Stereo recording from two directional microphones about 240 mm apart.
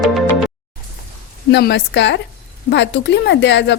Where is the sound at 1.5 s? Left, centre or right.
Left.